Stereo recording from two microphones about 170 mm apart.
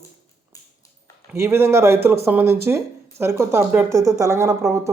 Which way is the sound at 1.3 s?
15° right (ahead or behind).